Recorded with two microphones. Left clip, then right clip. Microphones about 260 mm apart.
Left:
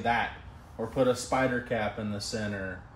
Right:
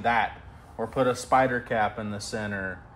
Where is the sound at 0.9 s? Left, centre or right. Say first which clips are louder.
Right 4 dB; centre.